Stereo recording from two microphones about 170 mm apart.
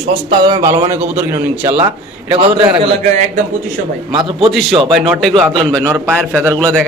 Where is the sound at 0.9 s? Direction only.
10° right (ahead or behind).